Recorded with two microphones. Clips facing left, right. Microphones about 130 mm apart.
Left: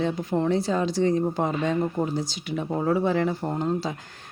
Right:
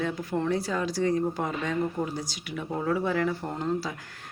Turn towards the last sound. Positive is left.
turn(degrees=25)  # may be behind; listen again after turning